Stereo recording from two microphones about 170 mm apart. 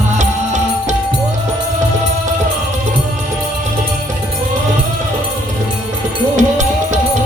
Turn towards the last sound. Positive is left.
turn(degrees=-45)  # may be behind; listen again after turning